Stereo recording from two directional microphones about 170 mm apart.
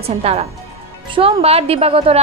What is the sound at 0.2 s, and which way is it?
A woman's voice, 40° right (ahead or behind).